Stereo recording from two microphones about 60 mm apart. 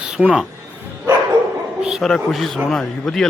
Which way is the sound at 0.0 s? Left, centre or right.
Centre.